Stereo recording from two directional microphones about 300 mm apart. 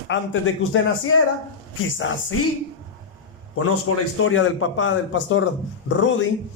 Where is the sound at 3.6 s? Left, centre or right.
Left.